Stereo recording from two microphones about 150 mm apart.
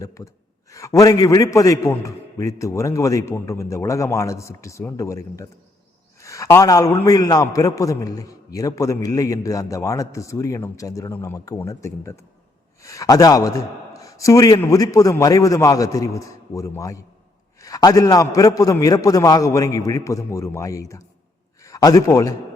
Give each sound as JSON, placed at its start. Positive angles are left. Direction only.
{"t": 0.7, "sound": "a man's voice", "side_deg": 20}